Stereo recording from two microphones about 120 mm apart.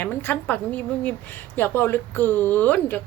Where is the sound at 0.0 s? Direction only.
15° left (ahead or behind).